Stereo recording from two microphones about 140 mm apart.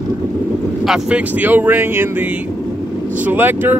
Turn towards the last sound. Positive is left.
turn(degrees=-15)  # may be behind; listen again after turning